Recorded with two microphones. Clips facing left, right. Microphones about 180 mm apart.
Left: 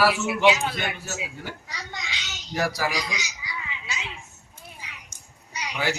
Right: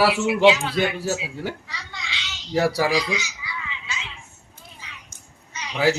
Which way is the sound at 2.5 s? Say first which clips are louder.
Right 6 dB; 30° right (ahead or behind).